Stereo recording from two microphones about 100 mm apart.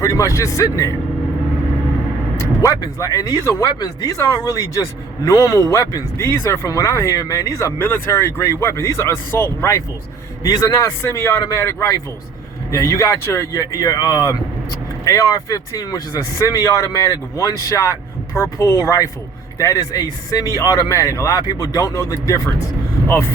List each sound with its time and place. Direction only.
0.0 s speech: 35° left (ahead or behind)
2.4 s speech: 35° left (ahead or behind)